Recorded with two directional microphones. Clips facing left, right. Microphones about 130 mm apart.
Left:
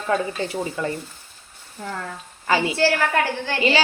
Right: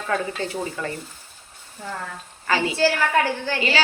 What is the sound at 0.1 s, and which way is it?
Speech, 20° left (ahead or behind).